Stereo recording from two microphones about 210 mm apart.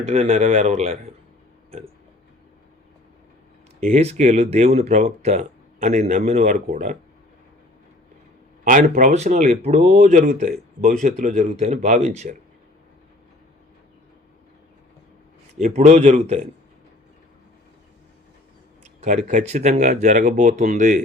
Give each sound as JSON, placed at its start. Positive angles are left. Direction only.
{"t": 0.1, "sound": "speech", "side_deg": -30}
{"t": 3.8, "sound": "speech", "side_deg": -30}
{"t": 8.6, "sound": "speech", "side_deg": -35}
{"t": 15.5, "sound": "speech", "side_deg": -35}
{"t": 18.9, "sound": "speech", "side_deg": -35}